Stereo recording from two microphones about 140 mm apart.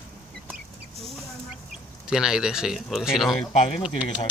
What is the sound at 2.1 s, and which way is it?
Speech, 5° right (ahead or behind).